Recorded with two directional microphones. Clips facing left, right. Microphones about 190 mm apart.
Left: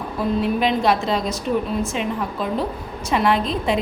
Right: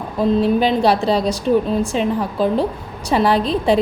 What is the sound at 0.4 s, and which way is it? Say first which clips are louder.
A woman's voice: right 1 dB; 30° right (ahead or behind).